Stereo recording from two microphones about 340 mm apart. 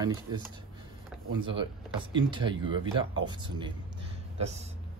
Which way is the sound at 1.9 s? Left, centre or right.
Centre.